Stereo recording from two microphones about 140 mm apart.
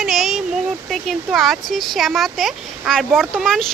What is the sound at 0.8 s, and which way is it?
Speech, centre (ahead or behind).